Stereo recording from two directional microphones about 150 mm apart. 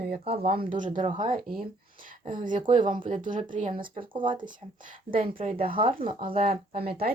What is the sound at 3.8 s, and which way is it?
Speech, 70° right (ahead or behind).